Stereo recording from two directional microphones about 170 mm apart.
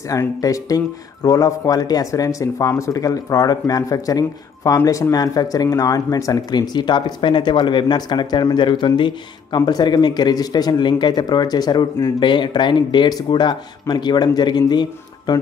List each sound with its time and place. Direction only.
0.1 s speech: 20° left (ahead or behind)